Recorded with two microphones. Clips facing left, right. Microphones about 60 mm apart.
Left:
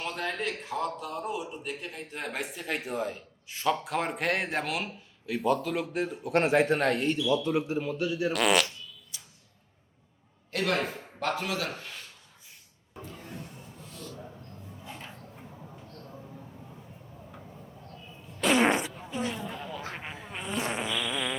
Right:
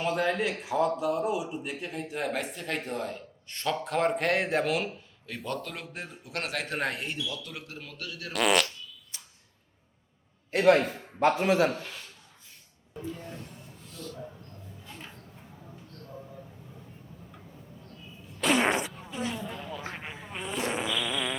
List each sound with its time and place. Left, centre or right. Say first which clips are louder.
0.0 s speech: right 5 dB; centre
6.3 s speech: left 10 dB; left
6.7 s speech: left 5 dB; centre
7.3 s speech: left 13 dB; left
8.3 s speech: right 2 dB; centre
9.1 s a sound: right 1 dB; right
10.5 s a man's voice: right 7 dB; right
13.2 s music: even; centre
13.9 s a sound: right 2 dB; centre
18.3 s fart: left 1 dB; centre
19.9 s insect: even; centre